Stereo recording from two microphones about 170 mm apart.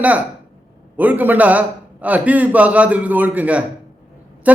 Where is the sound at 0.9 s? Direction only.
10° right (ahead or behind).